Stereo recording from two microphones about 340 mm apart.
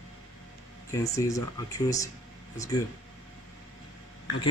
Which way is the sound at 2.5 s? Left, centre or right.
Centre.